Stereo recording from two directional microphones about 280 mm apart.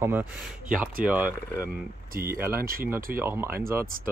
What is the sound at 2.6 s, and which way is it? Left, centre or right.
Speech, right.